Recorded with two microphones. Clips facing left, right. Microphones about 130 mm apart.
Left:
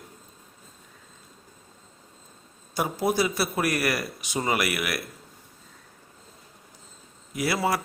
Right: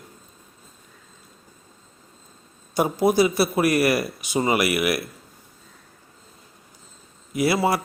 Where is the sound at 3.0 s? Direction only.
15° right (ahead or behind).